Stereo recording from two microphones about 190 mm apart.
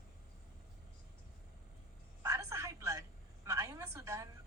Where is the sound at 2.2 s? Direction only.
15° right (ahead or behind).